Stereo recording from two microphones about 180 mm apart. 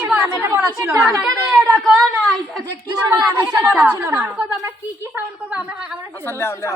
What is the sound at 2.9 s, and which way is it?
Speech, 15° right (ahead or behind).